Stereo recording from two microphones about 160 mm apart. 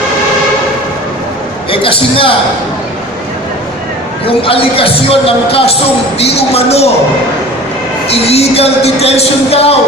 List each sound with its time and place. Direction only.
1.7 s speech: 35° left (ahead or behind)
4.3 s speech: 35° left (ahead or behind)
8.1 s speech: 40° left (ahead or behind)